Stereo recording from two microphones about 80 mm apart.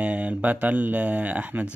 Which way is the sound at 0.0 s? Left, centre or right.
Centre.